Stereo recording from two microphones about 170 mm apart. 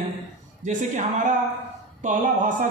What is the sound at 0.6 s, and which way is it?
Speech, 45° right (ahead or behind).